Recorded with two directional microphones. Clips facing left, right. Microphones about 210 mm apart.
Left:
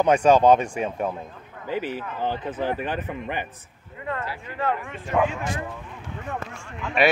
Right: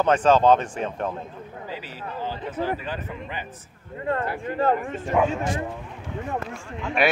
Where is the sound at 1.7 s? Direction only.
55° left (ahead or behind).